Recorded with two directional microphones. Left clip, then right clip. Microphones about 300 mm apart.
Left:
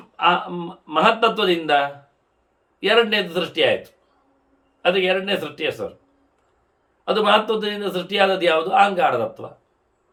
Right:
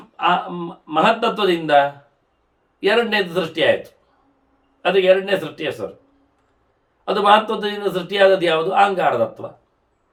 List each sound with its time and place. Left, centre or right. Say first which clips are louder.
0.2 s a man's voice: even; centre
4.8 s a man's voice: right 4 dB; centre
7.0 s a man's voice: right 3 dB; centre